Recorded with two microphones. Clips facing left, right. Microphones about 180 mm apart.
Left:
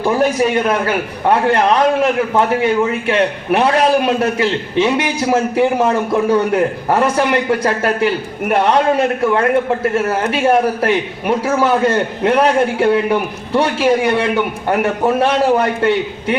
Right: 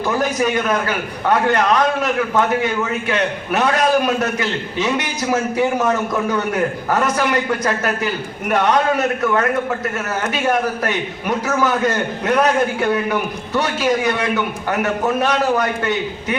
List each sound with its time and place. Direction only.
0.0 s a man's voice: 30° left (ahead or behind)